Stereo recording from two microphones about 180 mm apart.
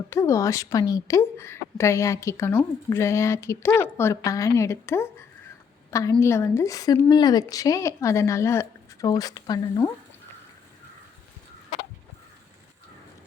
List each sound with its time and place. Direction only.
0.1 s a woman's voice: 15° left (ahead or behind)